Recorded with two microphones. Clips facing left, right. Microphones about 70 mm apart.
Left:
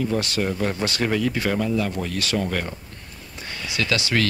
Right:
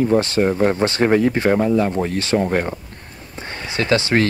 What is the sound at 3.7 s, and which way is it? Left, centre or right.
Speech, right.